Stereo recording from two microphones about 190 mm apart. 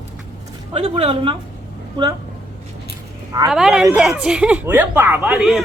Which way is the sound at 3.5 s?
5° right (ahead or behind).